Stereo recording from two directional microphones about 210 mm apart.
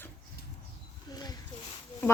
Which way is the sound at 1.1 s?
20° left (ahead or behind).